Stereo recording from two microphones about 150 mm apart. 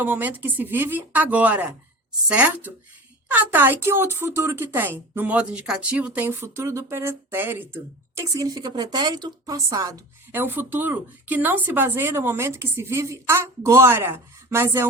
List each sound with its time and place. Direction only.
0.0 s speech: 10° right (ahead or behind)
10.3 s speech: 15° right (ahead or behind)